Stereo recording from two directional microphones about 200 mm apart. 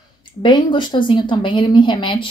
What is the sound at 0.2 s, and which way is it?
Speech, 25° left (ahead or behind).